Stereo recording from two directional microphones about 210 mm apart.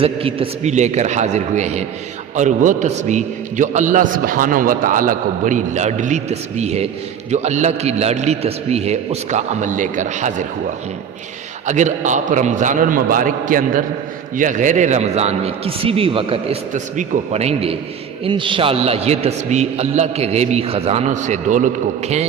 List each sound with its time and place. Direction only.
0.0 s a man's voice: 25° right (ahead or behind)
11.6 s a man's voice: 35° right (ahead or behind)